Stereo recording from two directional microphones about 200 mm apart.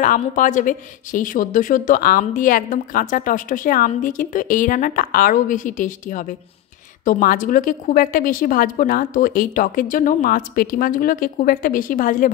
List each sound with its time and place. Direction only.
0.0 s speech: 40° left (ahead or behind)